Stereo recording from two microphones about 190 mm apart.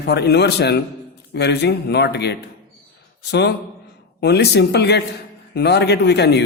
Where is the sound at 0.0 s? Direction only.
60° left (ahead or behind).